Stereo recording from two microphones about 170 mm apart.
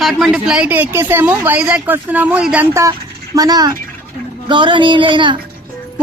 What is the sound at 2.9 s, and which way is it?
Speech, 25° right (ahead or behind).